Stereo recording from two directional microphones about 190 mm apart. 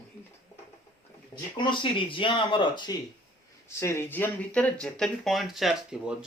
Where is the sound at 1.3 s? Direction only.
25° left (ahead or behind).